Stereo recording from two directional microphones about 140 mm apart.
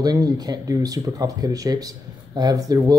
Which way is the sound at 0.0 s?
25° right (ahead or behind).